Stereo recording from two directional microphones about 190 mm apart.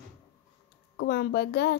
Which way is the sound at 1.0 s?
60° left (ahead or behind).